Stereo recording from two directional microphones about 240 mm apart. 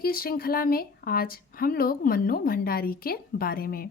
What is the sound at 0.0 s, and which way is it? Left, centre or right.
A woman's voice, left.